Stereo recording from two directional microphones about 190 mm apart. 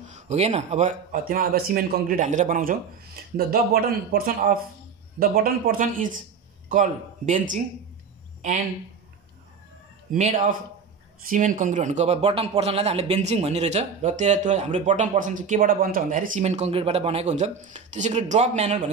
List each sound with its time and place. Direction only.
0.0 s speech: 35° right (ahead or behind)
4.1 s a man's voice: 45° right (ahead or behind)
10.1 s a man's voice: 40° right (ahead or behind)